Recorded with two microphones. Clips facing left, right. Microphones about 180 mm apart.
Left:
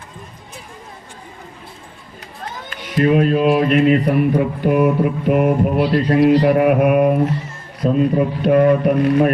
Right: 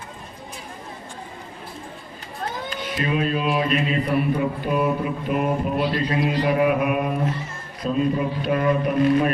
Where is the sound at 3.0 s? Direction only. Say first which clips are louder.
Left 10 dB; 60° left (ahead or behind).